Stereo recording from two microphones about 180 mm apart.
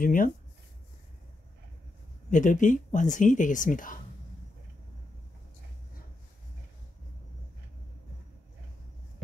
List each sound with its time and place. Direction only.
0.0 s speech: 50° left (ahead or behind)
2.3 s speech: 45° left (ahead or behind)